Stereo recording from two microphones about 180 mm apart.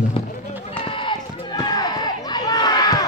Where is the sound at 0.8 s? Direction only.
25° left (ahead or behind).